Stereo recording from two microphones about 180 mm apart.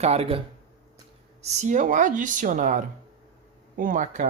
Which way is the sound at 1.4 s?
45° right (ahead or behind).